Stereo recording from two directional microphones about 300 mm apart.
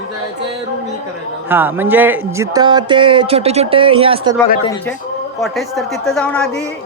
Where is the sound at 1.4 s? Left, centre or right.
Centre.